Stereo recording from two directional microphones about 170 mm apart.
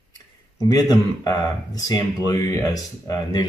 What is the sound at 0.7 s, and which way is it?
Speech, 20° left (ahead or behind).